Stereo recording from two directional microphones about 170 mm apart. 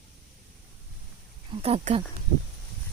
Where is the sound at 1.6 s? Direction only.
35° right (ahead or behind).